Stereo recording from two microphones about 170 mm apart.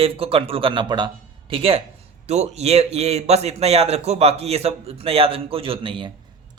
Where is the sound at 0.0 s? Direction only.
35° right (ahead or behind).